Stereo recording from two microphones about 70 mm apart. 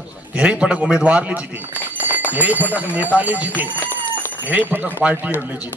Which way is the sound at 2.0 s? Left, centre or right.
Right.